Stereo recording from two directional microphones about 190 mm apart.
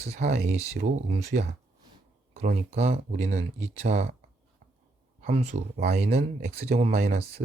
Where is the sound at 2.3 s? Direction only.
35° right (ahead or behind).